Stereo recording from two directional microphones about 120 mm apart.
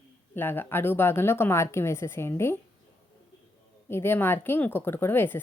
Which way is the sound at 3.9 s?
20° left (ahead or behind).